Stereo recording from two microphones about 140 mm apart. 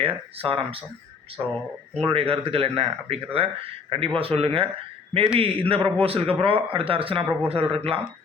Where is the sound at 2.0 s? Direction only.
40° right (ahead or behind).